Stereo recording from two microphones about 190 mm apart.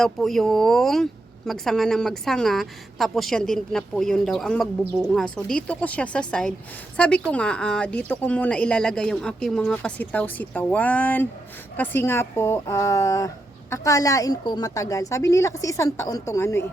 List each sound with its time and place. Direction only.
0.0 s a woman's voice: centre (ahead or behind)